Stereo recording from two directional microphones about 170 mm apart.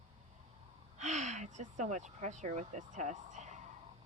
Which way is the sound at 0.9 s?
45° right (ahead or behind).